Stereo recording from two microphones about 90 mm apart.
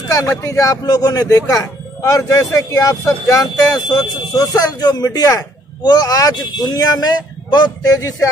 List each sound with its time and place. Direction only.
0.1 s speech: 40° left (ahead or behind)
3.7 s speech: 50° left (ahead or behind)